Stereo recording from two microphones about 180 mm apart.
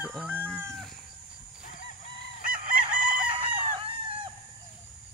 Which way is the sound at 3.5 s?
30° right (ahead or behind).